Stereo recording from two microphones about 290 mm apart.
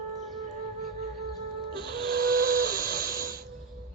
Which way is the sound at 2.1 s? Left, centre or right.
Right.